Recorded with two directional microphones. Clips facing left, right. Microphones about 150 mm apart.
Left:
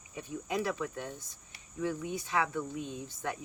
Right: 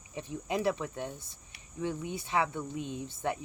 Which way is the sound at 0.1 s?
25° right (ahead or behind).